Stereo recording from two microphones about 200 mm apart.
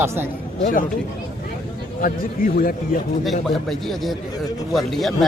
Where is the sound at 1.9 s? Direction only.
45° left (ahead or behind).